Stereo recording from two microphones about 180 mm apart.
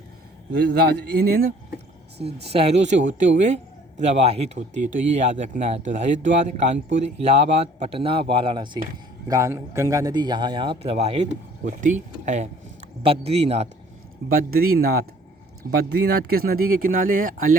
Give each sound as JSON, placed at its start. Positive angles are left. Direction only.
{"t": 0.9, "sound": "speech", "side_deg": -60}
{"t": 2.5, "sound": "speech", "side_deg": -35}
{"t": 14.3, "sound": "speech", "side_deg": -55}